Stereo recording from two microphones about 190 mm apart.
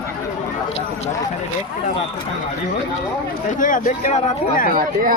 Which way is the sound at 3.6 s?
45° left (ahead or behind).